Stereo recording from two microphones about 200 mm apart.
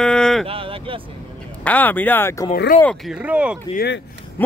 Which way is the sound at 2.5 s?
50° left (ahead or behind).